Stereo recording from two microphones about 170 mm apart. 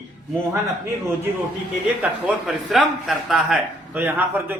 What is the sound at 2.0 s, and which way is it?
A man's voice, 5° right (ahead or behind).